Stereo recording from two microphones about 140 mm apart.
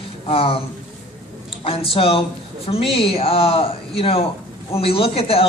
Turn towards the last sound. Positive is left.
turn(degrees=45)  # may be behind; listen again after turning